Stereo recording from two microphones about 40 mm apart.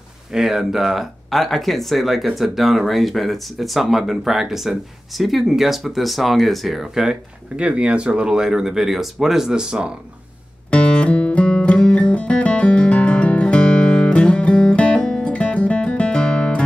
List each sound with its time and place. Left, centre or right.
0.3 s speech: centre
6.8 s speech: centre
7.5 s speech: right
10.7 s music: left
15.0 s music: centre
15.2 s music: left